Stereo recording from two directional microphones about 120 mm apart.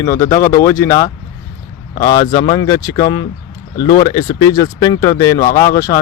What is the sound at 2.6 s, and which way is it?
Speech, 30° left (ahead or behind).